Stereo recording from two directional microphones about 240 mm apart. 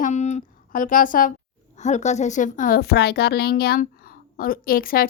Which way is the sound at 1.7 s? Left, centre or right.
Left.